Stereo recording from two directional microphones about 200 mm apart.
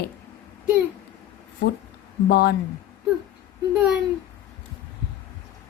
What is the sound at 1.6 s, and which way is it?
Speech, 55° left (ahead or behind).